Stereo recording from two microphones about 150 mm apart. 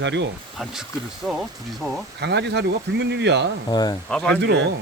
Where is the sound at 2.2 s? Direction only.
90° right.